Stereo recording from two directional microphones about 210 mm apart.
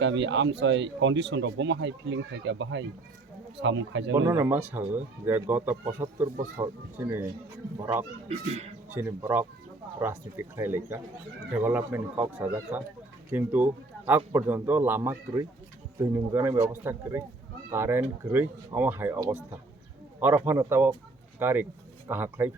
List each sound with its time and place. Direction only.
0.0 s speech: 60° right (ahead or behind)
4.1 s speech: 15° right (ahead or behind)
6.6 s speech: 20° right (ahead or behind)
8.3 s speech: 30° right (ahead or behind)
8.9 s speech: 10° right (ahead or behind)